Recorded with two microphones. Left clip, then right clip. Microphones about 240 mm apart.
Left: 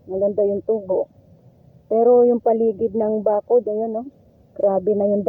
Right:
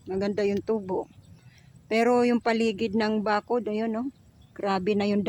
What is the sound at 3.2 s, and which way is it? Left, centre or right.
Speech, right.